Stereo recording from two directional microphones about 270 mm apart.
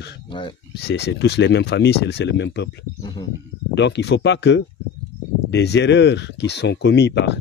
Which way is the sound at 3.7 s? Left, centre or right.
Left.